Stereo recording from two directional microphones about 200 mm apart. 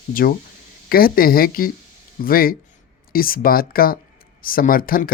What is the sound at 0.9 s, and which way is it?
Speech, 50° left (ahead or behind).